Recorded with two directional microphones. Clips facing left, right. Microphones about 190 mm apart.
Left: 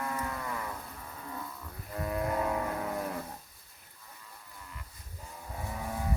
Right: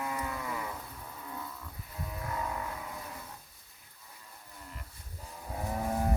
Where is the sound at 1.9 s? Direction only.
65° left (ahead or behind).